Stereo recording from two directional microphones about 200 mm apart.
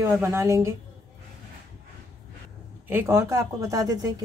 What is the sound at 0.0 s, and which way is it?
Speech, 15° right (ahead or behind).